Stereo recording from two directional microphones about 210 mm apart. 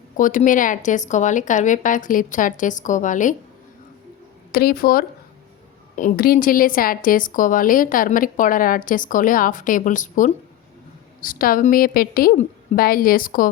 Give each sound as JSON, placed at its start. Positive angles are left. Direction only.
{"t": 0.2, "sound": "a woman's voice", "side_deg": 40}
{"t": 4.5, "sound": "a woman's voice", "side_deg": 45}